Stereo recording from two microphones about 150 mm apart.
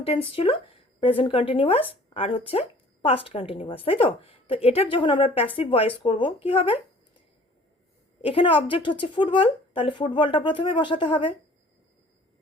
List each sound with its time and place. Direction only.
0.0 s a woman's voice: 40° left (ahead or behind)
8.2 s a woman's voice: 35° left (ahead or behind)